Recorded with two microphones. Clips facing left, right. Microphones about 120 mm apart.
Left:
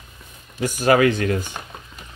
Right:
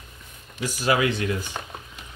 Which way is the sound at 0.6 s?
50° left (ahead or behind).